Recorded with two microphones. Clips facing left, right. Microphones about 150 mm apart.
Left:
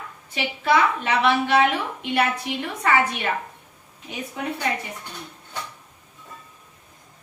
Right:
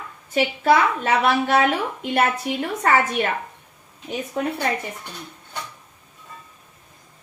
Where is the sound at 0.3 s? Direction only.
45° right (ahead or behind).